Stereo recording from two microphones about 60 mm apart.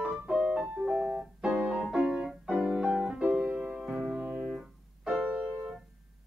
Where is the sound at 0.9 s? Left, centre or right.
Centre.